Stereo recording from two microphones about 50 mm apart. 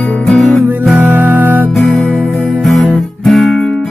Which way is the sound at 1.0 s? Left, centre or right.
Right.